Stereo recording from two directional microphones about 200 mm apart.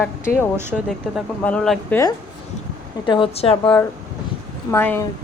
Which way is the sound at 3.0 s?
25° left (ahead or behind).